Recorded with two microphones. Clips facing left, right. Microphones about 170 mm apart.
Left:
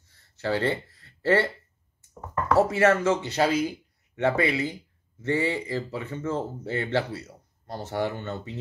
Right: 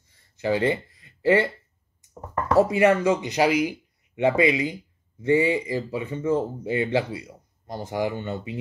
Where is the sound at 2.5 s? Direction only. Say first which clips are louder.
Right 2 dB; 15° right (ahead or behind).